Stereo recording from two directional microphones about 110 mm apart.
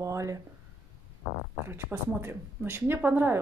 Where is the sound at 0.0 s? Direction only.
30° right (ahead or behind).